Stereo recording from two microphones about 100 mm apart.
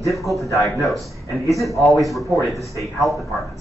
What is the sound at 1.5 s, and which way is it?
Speech, centre (ahead or behind).